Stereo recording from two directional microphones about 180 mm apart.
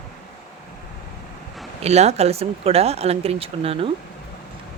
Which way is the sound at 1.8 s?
35° right (ahead or behind).